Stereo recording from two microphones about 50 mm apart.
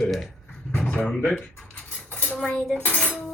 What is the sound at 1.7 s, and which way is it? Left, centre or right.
Cutlery, left.